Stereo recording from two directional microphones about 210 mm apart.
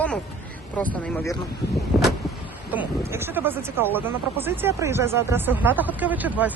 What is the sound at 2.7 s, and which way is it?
Speech, 10° right (ahead or behind).